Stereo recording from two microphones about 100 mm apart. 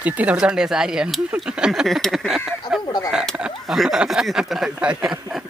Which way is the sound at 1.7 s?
Centre (ahead or behind).